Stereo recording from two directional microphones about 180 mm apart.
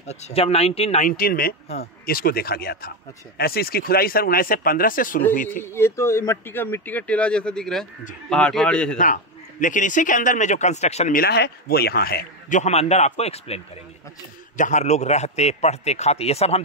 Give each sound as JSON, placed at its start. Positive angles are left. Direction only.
{"t": 0.0, "sound": "a man's voice", "side_deg": 40}
{"t": 5.6, "sound": "a man's voice", "side_deg": 15}
{"t": 8.9, "sound": "a man's voice", "side_deg": 45}
{"t": 11.1, "sound": "a man's voice", "side_deg": 65}
{"t": 14.6, "sound": "a man's voice", "side_deg": 40}